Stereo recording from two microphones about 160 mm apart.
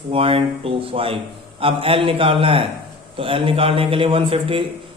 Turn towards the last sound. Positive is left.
turn(degrees=-35)  # may be behind; listen again after turning